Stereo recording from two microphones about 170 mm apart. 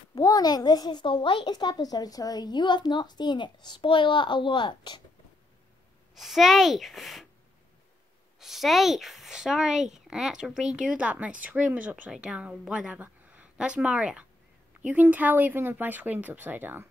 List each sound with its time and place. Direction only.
0.1 s a woman's voice: 25° left (ahead or behind)
6.1 s speech: centre (ahead or behind)
8.4 s a woman's voice: centre (ahead or behind)